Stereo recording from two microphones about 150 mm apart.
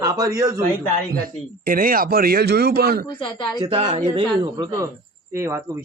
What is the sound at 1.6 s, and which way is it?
Speech, 70° right (ahead or behind).